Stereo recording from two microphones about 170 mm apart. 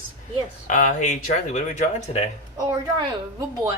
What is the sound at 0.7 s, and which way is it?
Speech, 50° left (ahead or behind).